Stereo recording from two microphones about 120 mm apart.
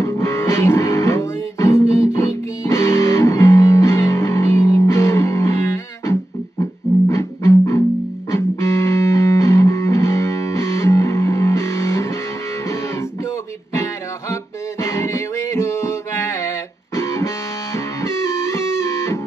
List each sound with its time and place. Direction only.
0.0 s music: 20° left (ahead or behind)
14.3 s music: 25° left (ahead or behind)